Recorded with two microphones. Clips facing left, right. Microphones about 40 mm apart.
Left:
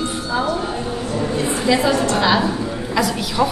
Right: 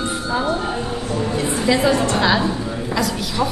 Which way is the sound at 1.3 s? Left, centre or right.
Centre.